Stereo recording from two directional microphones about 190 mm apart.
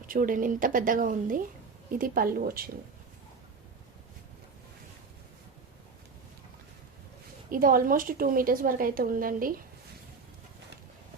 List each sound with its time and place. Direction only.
0.1 s a woman's voice: 45° right (ahead or behind)
7.5 s a woman's voice: 45° right (ahead or behind)